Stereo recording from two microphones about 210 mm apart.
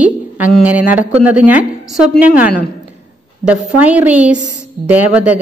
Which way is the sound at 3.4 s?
5° right (ahead or behind).